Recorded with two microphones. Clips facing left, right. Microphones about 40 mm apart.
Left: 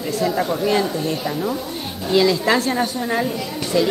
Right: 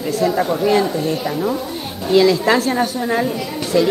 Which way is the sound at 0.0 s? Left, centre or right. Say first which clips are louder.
Right 3 dB; centre.